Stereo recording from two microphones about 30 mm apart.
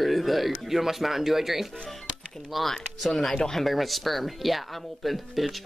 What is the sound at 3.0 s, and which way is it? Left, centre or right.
Speech, centre.